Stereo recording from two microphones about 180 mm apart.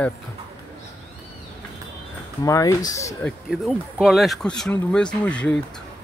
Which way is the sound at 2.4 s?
15° left (ahead or behind).